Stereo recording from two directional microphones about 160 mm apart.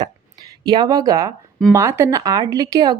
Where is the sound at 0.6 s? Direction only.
25° right (ahead or behind).